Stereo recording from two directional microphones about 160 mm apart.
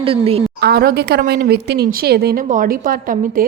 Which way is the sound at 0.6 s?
75° right (ahead or behind).